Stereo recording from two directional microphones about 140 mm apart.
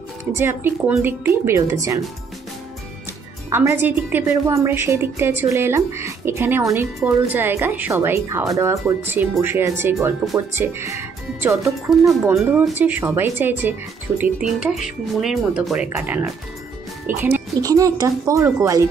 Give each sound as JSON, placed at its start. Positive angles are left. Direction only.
{"t": 0.2, "sound": "speech", "side_deg": -15}
{"t": 3.5, "sound": "speech", "side_deg": -15}
{"t": 11.9, "sound": "speech", "side_deg": 0}
{"t": 12.7, "sound": "speech", "side_deg": -15}
{"t": 17.6, "sound": "speech", "side_deg": -25}